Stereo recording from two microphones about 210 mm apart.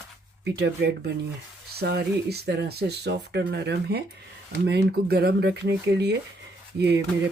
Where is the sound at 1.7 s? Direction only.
50° right (ahead or behind).